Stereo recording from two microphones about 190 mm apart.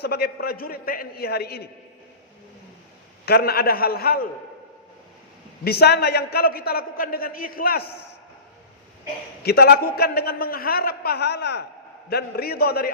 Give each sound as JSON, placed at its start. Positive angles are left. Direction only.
{"t": 0.0, "sound": "a man's voice", "side_deg": 55}
{"t": 3.2, "sound": "a man's voice", "side_deg": 55}
{"t": 5.6, "sound": "a man's voice", "side_deg": 55}
{"t": 9.4, "sound": "a man's voice", "side_deg": 55}